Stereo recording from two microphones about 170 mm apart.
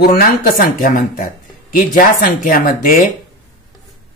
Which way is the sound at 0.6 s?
55° left (ahead or behind).